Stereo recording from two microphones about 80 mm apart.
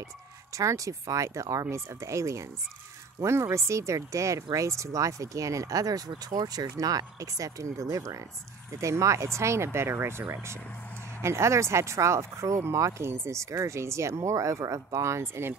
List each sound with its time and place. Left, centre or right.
0.5 s speech: right